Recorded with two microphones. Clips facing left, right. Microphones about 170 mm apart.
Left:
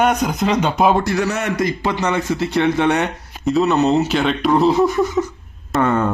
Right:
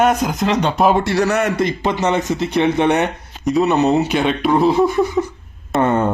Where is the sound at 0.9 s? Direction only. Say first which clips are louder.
Right 2 dB; 25° right (ahead or behind); by 4.8 s centre (ahead or behind).